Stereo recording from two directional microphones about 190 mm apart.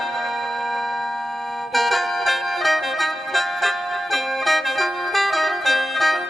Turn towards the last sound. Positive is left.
turn(degrees=0)  # may be behind; listen again after turning